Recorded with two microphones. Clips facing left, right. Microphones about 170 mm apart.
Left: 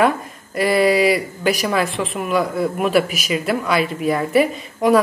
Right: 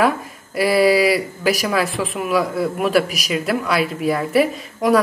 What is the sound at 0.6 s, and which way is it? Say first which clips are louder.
Speech: right 1 dB; centre (ahead or behind).